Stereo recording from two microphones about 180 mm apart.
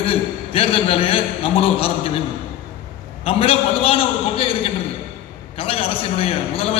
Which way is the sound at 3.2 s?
30° left (ahead or behind).